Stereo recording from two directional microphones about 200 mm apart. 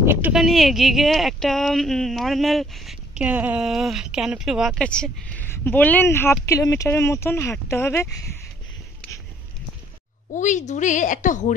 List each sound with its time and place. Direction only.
0.0 s speech: 10° right (ahead or behind); by 8.1 s 10° left (ahead or behind)
10.3 s a woman's voice: 40° left (ahead or behind)